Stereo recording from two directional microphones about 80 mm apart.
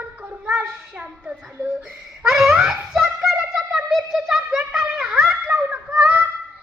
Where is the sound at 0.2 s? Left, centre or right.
Centre.